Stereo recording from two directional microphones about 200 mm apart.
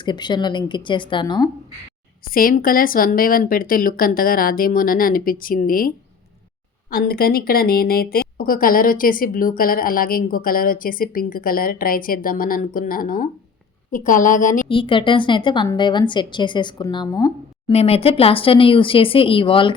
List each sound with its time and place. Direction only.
0.0 s a woman's voice: 20° left (ahead or behind)
2.2 s a woman's voice: 45° left (ahead or behind)
6.9 s a woman's voice: 50° left (ahead or behind)
14.7 s a woman's voice: 25° left (ahead or behind)
17.7 s a woman's voice: 30° left (ahead or behind)